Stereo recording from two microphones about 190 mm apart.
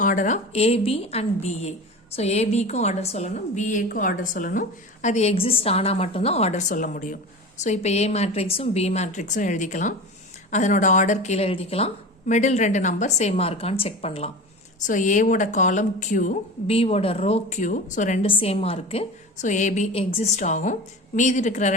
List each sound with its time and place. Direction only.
0.0 s a woman's voice: 45° left (ahead or behind)
18.3 s a woman's voice: 30° left (ahead or behind)